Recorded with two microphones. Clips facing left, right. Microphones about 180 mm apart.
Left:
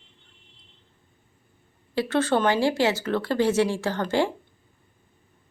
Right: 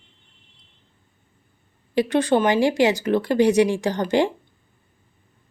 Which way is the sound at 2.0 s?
15° right (ahead or behind).